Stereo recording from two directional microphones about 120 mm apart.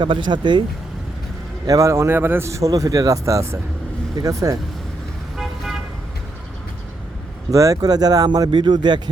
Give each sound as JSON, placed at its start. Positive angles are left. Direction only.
{"t": 0.0, "sound": "speech", "side_deg": -40}
{"t": 1.6, "sound": "a man's voice", "side_deg": -25}
{"t": 5.4, "sound": "vehicle", "side_deg": 0}
{"t": 7.5, "sound": "speech", "side_deg": -30}